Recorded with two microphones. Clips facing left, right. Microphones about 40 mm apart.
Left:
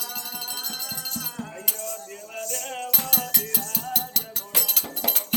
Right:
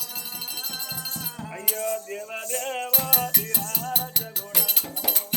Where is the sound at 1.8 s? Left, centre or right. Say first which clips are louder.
Right 7 dB; right.